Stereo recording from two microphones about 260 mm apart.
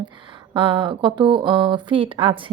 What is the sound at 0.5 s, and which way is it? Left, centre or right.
A woman's voice, right.